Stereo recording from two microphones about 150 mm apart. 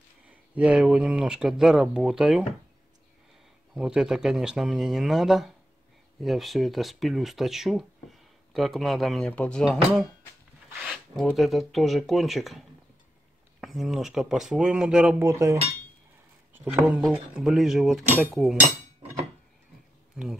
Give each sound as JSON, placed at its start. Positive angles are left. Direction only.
{"t": 0.6, "sound": "speech", "side_deg": -5}
{"t": 3.7, "sound": "speech", "side_deg": -5}
{"t": 10.7, "sound": "speech", "side_deg": -5}
{"t": 15.2, "sound": "speech", "side_deg": -20}